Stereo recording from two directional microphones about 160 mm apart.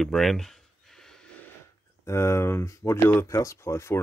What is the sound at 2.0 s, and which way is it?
Speech, 15° left (ahead or behind).